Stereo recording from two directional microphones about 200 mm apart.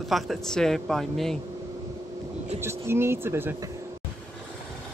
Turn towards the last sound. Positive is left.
turn(degrees=-10)  # may be behind; listen again after turning